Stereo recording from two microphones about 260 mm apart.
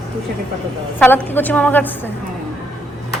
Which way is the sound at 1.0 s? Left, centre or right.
Centre.